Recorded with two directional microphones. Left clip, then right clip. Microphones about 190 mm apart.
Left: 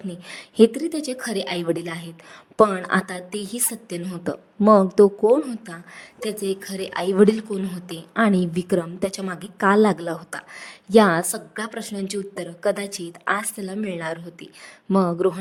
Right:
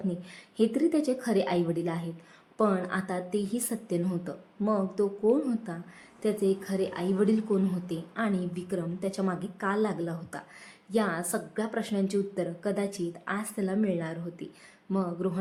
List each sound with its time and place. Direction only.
0.3 s a woman's voice: 55° left (ahead or behind)